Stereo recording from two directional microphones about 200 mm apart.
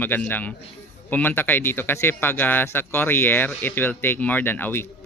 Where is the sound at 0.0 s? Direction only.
10° left (ahead or behind).